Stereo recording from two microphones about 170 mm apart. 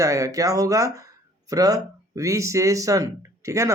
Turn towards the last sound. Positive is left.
turn(degrees=-20)  # may be behind; listen again after turning